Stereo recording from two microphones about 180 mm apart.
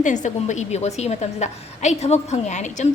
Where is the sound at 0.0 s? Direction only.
45° left (ahead or behind).